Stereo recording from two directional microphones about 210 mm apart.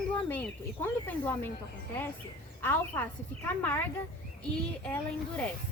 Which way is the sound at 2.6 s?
10° left (ahead or behind).